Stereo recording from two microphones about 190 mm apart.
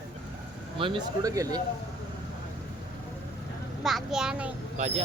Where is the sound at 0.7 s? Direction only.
25° right (ahead or behind).